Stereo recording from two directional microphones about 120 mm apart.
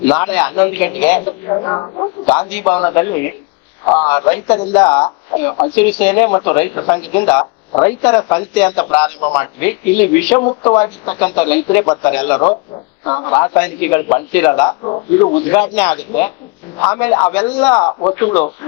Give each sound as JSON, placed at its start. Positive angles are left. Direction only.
{"t": 0.0, "sound": "speech", "side_deg": 20}
{"t": 2.2, "sound": "speech", "side_deg": 20}
{"t": 3.8, "sound": "a man's voice", "side_deg": 30}
{"t": 4.1, "sound": "a man's voice", "side_deg": 20}
{"t": 14.7, "sound": "a man's voice", "side_deg": 35}
{"t": 15.4, "sound": "speech", "side_deg": 20}
{"t": 16.7, "sound": "a man's voice", "side_deg": 30}